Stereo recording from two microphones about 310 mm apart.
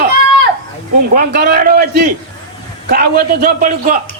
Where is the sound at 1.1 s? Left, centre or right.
Right.